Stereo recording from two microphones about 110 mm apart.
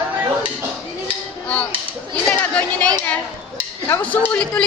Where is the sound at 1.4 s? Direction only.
15° left (ahead or behind).